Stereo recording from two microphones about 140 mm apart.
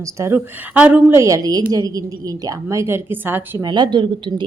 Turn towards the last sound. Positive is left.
turn(degrees=-35)  # may be behind; listen again after turning